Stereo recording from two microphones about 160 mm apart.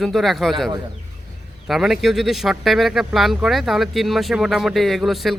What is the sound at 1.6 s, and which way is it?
Speech, centre (ahead or behind).